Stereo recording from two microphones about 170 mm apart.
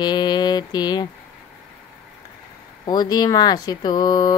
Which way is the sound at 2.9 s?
25° left (ahead or behind).